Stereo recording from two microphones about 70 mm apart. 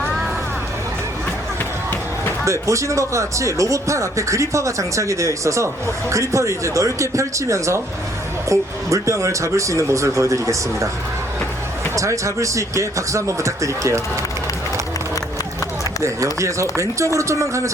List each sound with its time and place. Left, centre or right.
2.4 s speech: right
11.9 s speech: right
16.0 s speech: right